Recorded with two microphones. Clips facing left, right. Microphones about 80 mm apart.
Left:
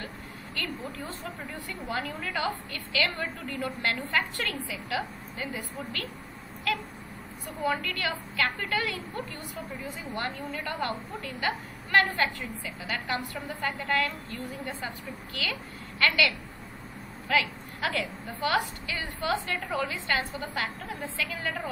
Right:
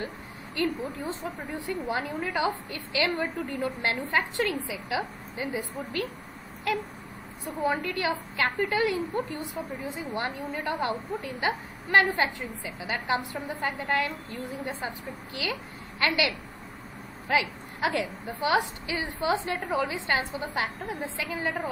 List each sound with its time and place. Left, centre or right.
0.6 s a woman's voice: centre
7.5 s a woman's voice: right